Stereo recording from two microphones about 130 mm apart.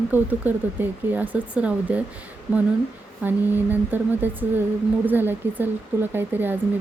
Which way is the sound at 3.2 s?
15° right (ahead or behind).